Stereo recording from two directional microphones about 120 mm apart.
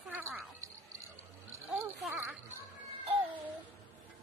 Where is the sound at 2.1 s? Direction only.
15° right (ahead or behind).